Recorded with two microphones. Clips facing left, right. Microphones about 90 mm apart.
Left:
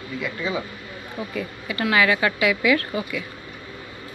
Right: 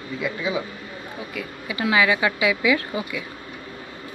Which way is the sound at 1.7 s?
15° right (ahead or behind).